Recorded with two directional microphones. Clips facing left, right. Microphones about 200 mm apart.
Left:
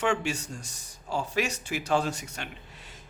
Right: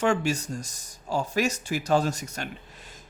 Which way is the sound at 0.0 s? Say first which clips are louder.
Right 4 dB; 40° right (ahead or behind).